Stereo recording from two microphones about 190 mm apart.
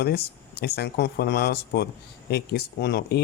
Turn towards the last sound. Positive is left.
turn(degrees=60)  # may be behind; listen again after turning